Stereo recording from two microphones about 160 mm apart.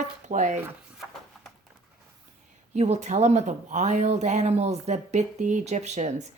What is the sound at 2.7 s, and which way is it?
Speech, 45° right (ahead or behind).